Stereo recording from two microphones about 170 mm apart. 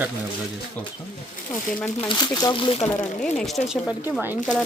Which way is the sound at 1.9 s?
25° left (ahead or behind).